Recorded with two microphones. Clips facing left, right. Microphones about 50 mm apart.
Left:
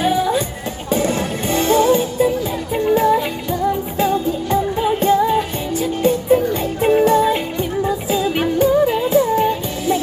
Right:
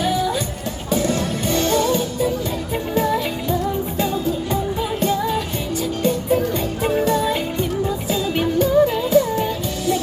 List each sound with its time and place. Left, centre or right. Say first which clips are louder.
0.0 s music: left 3 dB; left
2.7 s music: left 6 dB; centre
4.8 s music: left 8 dB; left
6.0 s music: left 5 dB; centre
6.8 s music: left 6 dB; left
8.1 s music: left 1 dB; centre